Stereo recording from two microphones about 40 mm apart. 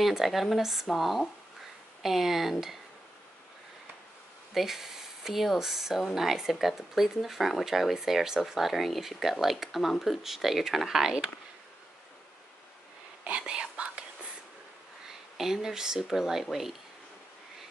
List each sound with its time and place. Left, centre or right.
0.0 s speech: centre
4.6 s speech: centre
13.4 s whispering: right
15.0 s speech: centre